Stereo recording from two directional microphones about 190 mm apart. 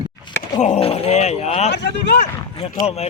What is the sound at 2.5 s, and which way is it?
Speech, 30° left (ahead or behind).